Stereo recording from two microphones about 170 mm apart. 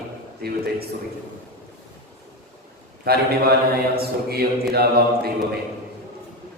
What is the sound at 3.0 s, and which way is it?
Speech, 65° right (ahead or behind).